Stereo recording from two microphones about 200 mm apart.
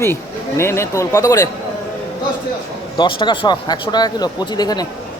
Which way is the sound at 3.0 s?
20° left (ahead or behind).